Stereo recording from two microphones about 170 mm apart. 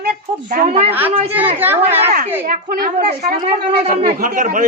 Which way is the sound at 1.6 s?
10° right (ahead or behind).